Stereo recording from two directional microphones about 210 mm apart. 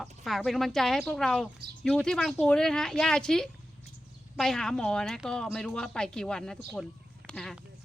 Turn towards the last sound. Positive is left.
turn(degrees=0)  # may be behind; listen again after turning